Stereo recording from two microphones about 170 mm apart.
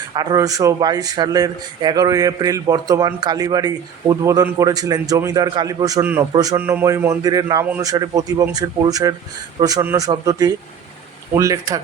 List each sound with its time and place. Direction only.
0.1 s speech: 25° right (ahead or behind)